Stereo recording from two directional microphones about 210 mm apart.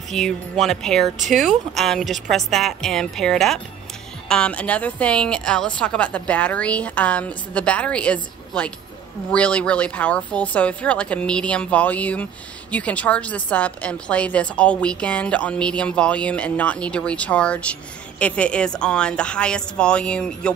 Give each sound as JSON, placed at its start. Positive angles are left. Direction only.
{"t": 0.1, "sound": "a woman's voice", "side_deg": 0}